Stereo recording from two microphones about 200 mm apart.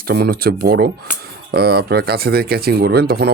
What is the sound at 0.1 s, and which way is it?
Speech, 50° right (ahead or behind).